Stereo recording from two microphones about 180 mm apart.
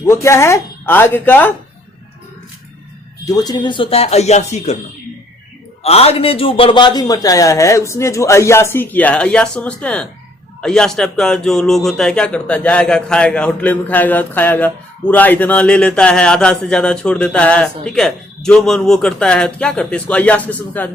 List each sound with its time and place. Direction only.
0.0 s speech: 15° left (ahead or behind)
3.2 s speech: 20° left (ahead or behind); by 4.8 s 40° left (ahead or behind)
5.8 s a man's voice: 35° left (ahead or behind); by 20.9 s 10° left (ahead or behind)